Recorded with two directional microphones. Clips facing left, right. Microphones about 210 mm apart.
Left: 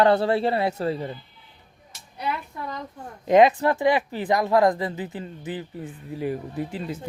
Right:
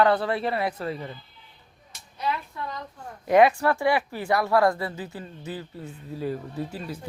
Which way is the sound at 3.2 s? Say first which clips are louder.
Left 2 dB; 20° left (ahead or behind).